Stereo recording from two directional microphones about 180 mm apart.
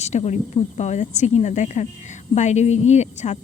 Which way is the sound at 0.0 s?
40° left (ahead or behind).